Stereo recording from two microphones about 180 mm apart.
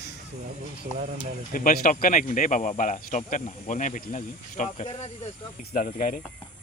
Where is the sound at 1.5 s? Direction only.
50° left (ahead or behind).